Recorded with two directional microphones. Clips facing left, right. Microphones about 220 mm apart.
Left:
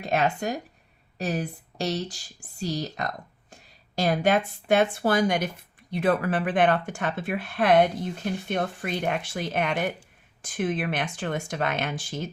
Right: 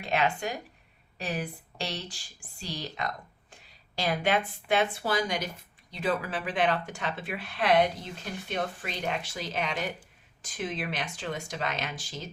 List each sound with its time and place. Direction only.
0.0 s speech: 40° left (ahead or behind)